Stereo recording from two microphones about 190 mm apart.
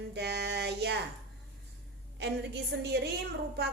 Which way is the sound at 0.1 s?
60° right (ahead or behind).